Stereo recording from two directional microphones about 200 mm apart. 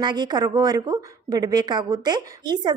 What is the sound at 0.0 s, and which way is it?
A woman's voice, 20° right (ahead or behind).